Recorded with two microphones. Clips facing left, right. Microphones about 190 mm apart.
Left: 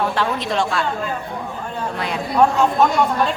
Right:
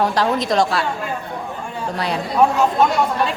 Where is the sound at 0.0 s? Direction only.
40° right (ahead or behind).